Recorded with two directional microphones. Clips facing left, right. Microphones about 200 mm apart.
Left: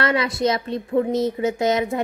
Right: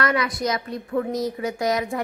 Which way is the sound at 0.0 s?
25° left (ahead or behind).